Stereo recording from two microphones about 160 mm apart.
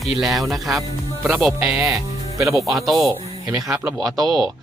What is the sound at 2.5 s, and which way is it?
Speech, centre (ahead or behind).